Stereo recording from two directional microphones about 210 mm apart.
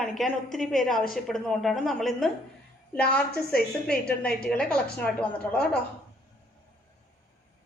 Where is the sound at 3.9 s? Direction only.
50° left (ahead or behind).